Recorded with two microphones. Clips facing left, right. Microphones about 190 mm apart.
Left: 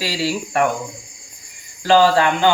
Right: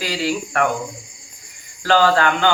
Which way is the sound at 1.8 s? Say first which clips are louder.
Left 2 dB; 25° left (ahead or behind).